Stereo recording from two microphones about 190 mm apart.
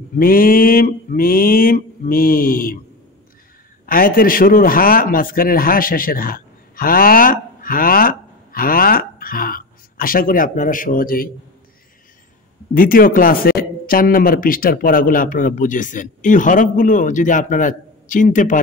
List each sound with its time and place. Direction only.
0.2 s speech: 50° left (ahead or behind)
3.8 s a man's voice: 50° left (ahead or behind)
12.7 s speech: 50° left (ahead or behind)